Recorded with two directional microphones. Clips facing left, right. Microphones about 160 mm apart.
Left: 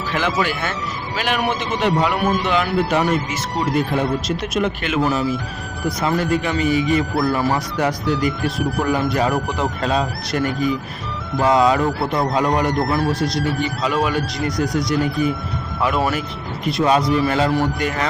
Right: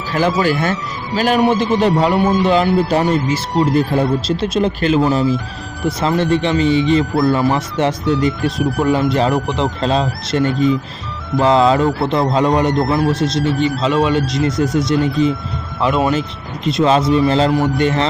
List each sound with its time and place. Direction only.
0.1 s speech: 35° right (ahead or behind)